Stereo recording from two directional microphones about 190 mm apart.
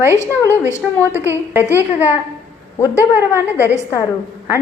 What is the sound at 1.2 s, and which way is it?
Speech, 10° right (ahead or behind).